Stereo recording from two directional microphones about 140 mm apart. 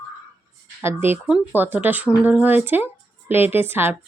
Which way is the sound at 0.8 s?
15° right (ahead or behind).